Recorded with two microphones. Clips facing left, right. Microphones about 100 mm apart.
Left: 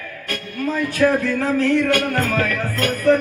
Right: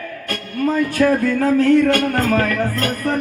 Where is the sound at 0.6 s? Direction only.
40° right (ahead or behind).